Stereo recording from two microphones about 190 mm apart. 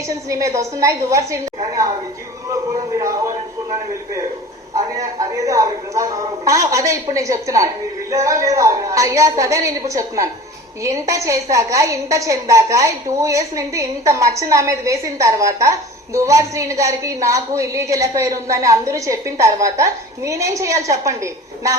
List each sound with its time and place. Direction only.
0.3 s a woman's voice: 15° right (ahead or behind)
2.5 s music: 15° right (ahead or behind)
4.7 s a woman's voice: 20° right (ahead or behind)